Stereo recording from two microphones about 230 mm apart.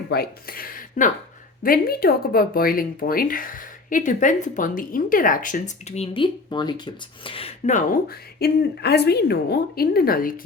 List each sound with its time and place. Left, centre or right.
0.1 s speech: left